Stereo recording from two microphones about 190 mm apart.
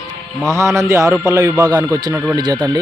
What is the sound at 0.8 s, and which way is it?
A man's voice, 15° right (ahead or behind).